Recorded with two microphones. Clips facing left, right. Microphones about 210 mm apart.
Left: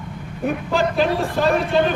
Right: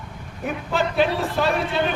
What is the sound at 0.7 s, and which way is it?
Speech, centre (ahead or behind).